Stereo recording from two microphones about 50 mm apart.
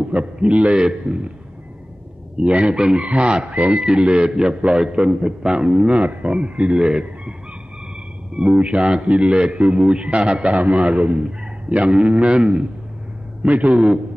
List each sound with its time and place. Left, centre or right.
0.1 s a man's voice: right
2.4 s a man's voice: right